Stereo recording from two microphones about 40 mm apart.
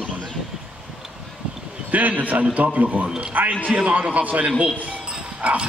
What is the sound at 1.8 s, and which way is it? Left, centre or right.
A man's voice, right.